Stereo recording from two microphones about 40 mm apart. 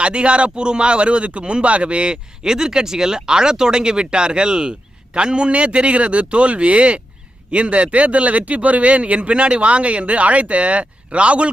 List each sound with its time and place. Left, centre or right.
0.0 s a man's voice: right